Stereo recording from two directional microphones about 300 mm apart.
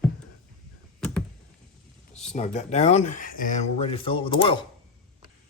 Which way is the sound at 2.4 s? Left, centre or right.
Left.